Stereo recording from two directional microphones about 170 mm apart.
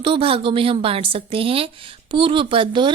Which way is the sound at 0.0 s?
30° right (ahead or behind).